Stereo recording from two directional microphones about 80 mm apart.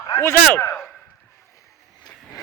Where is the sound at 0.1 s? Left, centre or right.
Left.